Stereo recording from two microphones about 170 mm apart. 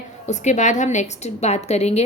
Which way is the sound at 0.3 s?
45° left (ahead or behind).